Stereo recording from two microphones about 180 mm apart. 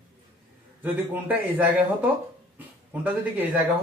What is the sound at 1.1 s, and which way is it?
Speech, 10° right (ahead or behind).